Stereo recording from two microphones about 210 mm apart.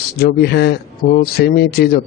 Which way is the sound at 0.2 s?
50° left (ahead or behind).